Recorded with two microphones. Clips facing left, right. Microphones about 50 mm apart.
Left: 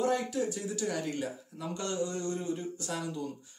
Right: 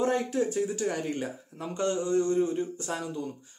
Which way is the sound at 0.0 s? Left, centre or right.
Right.